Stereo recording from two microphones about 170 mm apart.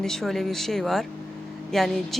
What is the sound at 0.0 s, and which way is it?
Speech, centre (ahead or behind).